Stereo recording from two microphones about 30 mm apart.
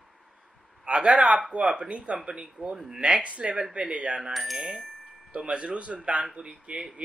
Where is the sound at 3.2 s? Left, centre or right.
Right.